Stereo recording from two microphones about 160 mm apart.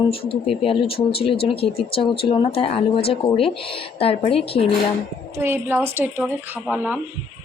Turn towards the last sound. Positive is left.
turn(degrees=-10)  # may be behind; listen again after turning